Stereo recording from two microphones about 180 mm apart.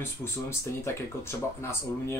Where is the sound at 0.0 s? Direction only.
15° left (ahead or behind).